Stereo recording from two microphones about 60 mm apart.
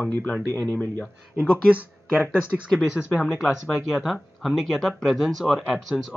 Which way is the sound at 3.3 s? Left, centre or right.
Centre.